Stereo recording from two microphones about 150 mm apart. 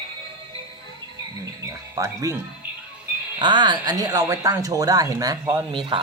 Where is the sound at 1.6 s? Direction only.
20° right (ahead or behind).